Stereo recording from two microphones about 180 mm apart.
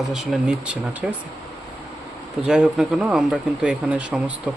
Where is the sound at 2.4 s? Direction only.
5° right (ahead or behind).